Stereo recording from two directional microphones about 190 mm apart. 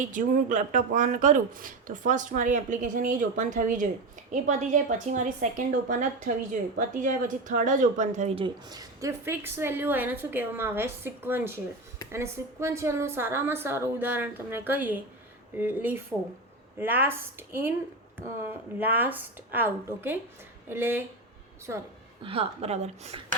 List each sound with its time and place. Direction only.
0.0 s a woman's voice: 45° right (ahead or behind)
8.4 s a woman's voice: 20° right (ahead or behind)
18.8 s a woman's voice: 10° right (ahead or behind)
22.2 s a woman's voice: 30° right (ahead or behind)